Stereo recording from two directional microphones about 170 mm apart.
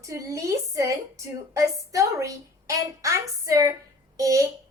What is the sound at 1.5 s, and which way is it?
Speech, 20° right (ahead or behind).